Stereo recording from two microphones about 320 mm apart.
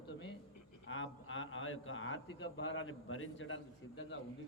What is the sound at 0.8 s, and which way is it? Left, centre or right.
A man's voice, left.